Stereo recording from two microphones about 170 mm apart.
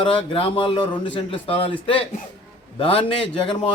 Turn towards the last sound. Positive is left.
turn(degrees=35)  # may be behind; listen again after turning